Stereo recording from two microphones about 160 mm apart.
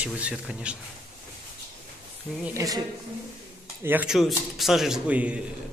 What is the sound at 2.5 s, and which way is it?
Speech, 20° right (ahead or behind).